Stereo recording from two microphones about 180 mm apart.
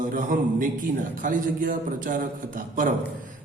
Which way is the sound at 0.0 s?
50° right (ahead or behind).